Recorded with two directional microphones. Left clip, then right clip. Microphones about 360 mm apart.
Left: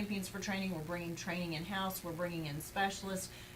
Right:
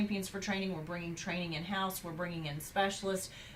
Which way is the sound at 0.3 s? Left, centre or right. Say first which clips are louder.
Right 2 dB; centre.